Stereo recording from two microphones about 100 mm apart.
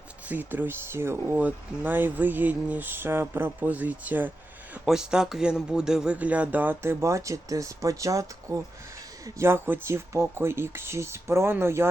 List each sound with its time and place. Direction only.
0.3 s speech: 20° right (ahead or behind)
4.9 s speech: 5° right (ahead or behind)
7.0 s speech: 30° right (ahead or behind)